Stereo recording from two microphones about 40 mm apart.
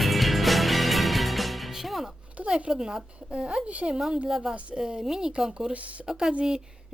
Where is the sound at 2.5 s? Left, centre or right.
Right.